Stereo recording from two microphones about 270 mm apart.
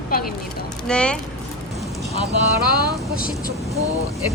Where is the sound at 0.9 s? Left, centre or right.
Centre.